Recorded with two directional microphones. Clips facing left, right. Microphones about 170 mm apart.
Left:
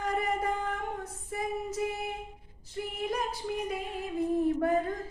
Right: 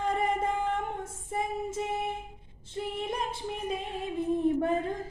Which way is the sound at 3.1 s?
25° right (ahead or behind).